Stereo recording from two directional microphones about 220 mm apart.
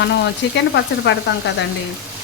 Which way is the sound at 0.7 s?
55° left (ahead or behind).